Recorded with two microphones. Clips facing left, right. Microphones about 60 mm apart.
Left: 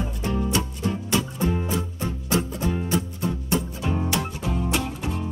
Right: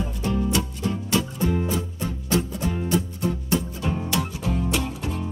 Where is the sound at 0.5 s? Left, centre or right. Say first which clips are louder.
Even; left.